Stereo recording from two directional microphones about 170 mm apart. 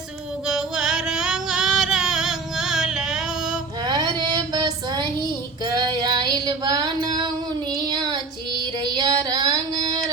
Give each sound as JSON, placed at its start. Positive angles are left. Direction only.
{"t": 0.4, "sound": "music", "side_deg": -5}
{"t": 3.8, "sound": "a sound", "side_deg": -25}
{"t": 5.6, "sound": "female singing", "side_deg": -25}
{"t": 7.8, "sound": "child singing", "side_deg": -25}
{"t": 8.8, "sound": "female singing", "side_deg": -25}